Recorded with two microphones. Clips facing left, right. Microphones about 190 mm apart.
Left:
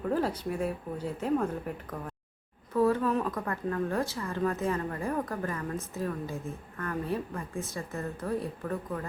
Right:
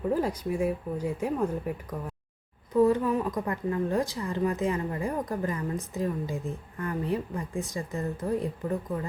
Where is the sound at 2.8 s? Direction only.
15° right (ahead or behind).